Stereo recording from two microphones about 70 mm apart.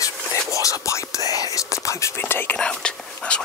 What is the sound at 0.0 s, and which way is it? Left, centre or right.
Whispering, left.